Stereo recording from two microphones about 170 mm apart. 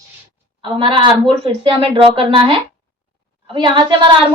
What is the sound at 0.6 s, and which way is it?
A woman's voice, 30° right (ahead or behind).